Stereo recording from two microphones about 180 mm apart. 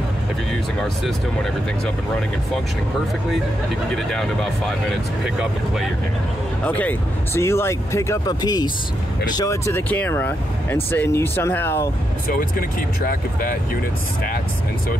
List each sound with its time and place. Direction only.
3.9 s speech: centre (ahead or behind)
6.6 s speech: 10° left (ahead or behind)
12.3 s speech: 55° left (ahead or behind)